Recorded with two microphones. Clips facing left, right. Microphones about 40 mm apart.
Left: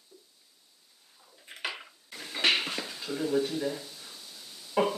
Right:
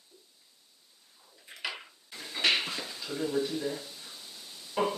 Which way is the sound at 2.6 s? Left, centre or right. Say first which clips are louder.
Left 2 dB; left.